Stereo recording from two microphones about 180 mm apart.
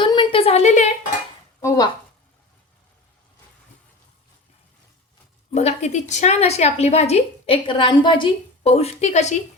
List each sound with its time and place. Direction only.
0.0 s a sound: 25° left (ahead or behind)
1.6 s speech: 20° left (ahead or behind)
5.5 s a woman's voice: 40° left (ahead or behind)